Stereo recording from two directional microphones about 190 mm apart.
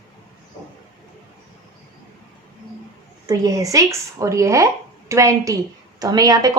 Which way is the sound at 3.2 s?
15° right (ahead or behind).